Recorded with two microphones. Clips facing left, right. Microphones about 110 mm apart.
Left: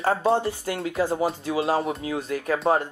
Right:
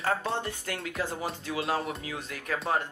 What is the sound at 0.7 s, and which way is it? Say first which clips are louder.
Speech: left 11 dB; 35° left (ahead or behind).